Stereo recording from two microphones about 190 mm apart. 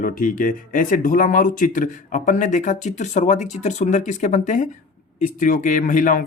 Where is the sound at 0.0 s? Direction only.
45° left (ahead or behind).